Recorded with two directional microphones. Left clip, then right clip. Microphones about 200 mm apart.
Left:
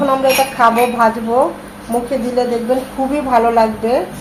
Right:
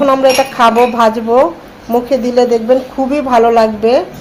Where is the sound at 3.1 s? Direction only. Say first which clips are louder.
Right 3 dB; 40° right (ahead or behind).